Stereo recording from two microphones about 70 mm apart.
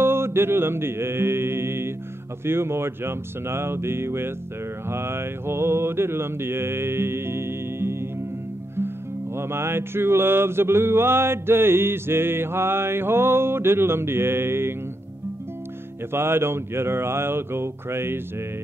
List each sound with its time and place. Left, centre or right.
0.0 s chant: right
2.4 s music: right
4.8 s mantra: right
8.7 s music: right
16.1 s music: right